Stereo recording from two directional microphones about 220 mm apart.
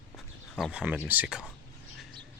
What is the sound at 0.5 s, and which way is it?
Speech, 5° right (ahead or behind).